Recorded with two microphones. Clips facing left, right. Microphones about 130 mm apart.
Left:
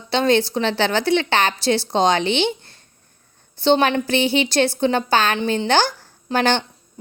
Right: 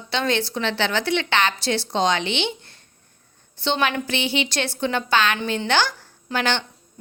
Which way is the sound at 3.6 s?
35° left (ahead or behind).